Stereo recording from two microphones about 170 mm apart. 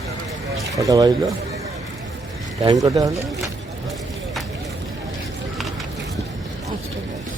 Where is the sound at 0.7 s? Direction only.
20° right (ahead or behind).